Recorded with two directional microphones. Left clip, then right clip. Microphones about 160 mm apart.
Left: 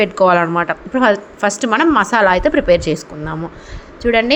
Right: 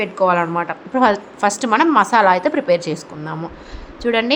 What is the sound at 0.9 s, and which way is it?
A woman's voice, 10° left (ahead or behind).